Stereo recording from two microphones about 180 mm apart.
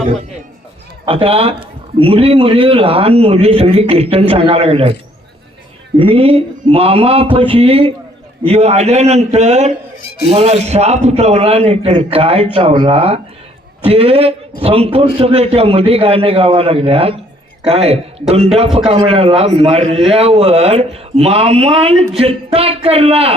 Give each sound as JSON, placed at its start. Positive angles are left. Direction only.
{"t": 1.0, "sound": "a man's voice", "side_deg": -30}
{"t": 6.0, "sound": "a man's voice", "side_deg": -30}